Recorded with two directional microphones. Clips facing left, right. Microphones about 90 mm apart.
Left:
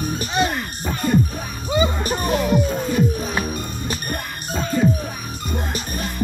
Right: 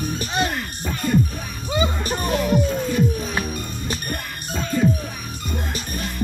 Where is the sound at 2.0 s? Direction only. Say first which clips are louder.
Left 2 dB; 10° left (ahead or behind).